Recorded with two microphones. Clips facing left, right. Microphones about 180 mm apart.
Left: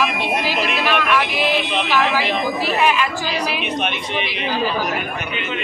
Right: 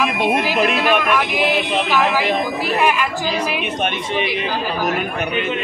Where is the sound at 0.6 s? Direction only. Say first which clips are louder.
Right 4 dB; 50° right (ahead or behind).